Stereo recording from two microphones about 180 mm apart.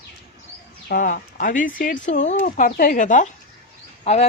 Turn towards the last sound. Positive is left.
turn(degrees=40)  # may be behind; listen again after turning